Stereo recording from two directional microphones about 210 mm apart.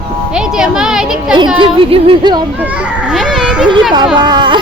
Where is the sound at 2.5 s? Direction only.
5° right (ahead or behind).